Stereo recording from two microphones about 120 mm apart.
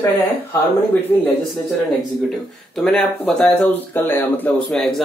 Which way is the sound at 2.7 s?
5° left (ahead or behind).